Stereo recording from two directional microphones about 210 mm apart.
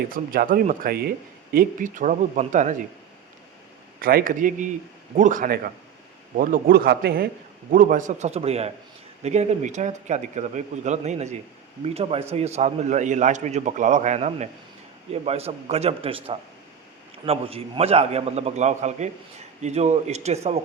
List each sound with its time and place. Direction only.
0.1 s a man's voice: 45° right (ahead or behind)
4.0 s a man's voice: 40° right (ahead or behind)